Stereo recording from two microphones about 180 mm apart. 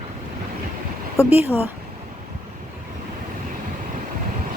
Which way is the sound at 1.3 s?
10° right (ahead or behind).